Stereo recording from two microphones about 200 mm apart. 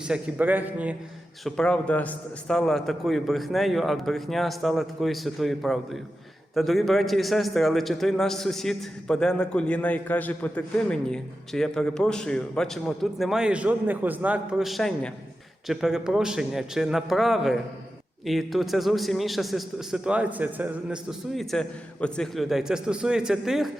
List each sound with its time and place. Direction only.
0.0 s a man's voice: 5° right (ahead or behind)
1.5 s a man's voice: 5° left (ahead or behind)